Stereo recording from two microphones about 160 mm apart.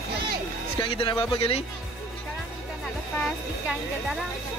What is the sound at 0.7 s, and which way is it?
Speech, 30° left (ahead or behind).